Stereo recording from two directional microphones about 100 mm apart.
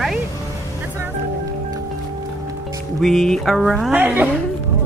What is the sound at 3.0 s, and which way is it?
Speech, centre (ahead or behind).